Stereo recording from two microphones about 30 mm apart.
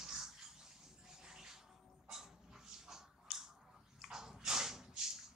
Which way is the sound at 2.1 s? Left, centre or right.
Centre.